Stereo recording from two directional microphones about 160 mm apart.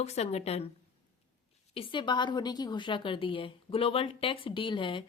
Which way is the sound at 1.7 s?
30° left (ahead or behind).